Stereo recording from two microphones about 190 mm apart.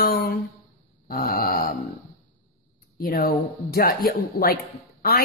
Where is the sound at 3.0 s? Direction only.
50° left (ahead or behind).